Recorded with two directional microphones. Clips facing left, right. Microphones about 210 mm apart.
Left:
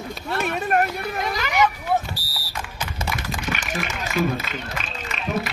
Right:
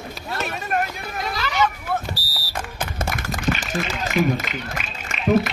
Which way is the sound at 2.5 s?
50° right (ahead or behind).